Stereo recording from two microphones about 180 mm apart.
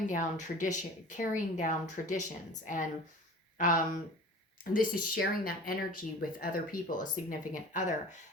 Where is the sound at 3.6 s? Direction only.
50° left (ahead or behind).